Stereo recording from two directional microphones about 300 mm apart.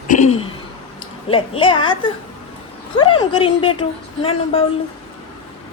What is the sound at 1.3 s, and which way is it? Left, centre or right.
A woman's voice, centre.